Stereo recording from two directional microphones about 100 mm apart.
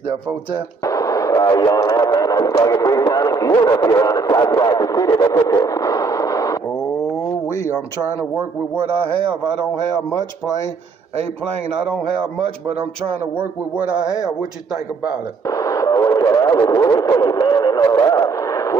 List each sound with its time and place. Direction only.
0.8 s radio: 35° left (ahead or behind)
5.5 s a sound: 35° left (ahead or behind)
13.4 s a man's voice: 15° right (ahead or behind)
15.4 s radio: 35° left (ahead or behind)